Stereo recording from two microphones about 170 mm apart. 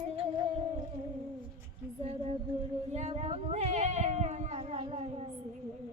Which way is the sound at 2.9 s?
40° right (ahead or behind).